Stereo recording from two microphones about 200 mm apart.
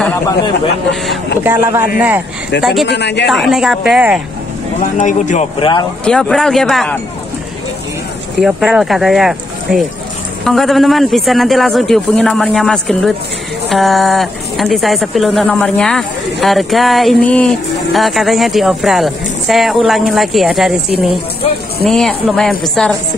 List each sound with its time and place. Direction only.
1.4 s a man's voice: 10° right (ahead or behind)
2.9 s a woman's voice: 60° left (ahead or behind)
3.3 s speech: centre (ahead or behind)
4.9 s speech: 40° left (ahead or behind)
6.0 s speech: 5° left (ahead or behind)
8.4 s speech: 5° right (ahead or behind)